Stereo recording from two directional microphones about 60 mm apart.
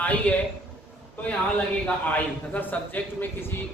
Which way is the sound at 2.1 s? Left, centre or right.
Left.